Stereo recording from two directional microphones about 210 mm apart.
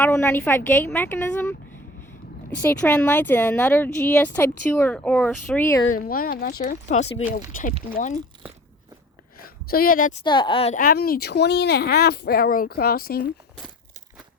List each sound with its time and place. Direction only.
0.0 s speech: 10° left (ahead or behind)
2.6 s speech: 10° left (ahead or behind)
6.0 s speech: 45° left (ahead or behind)
9.6 s speech: 45° left (ahead or behind)
10.2 s speech: 20° left (ahead or behind)
10.8 s speech: 45° left (ahead or behind)